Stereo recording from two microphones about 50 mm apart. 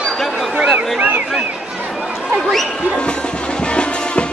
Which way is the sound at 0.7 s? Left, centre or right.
Right.